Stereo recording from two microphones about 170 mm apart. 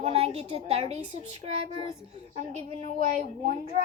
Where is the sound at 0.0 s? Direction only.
40° right (ahead or behind).